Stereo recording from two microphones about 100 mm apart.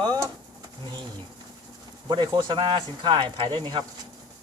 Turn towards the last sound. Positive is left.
turn(degrees=-55)  # may be behind; listen again after turning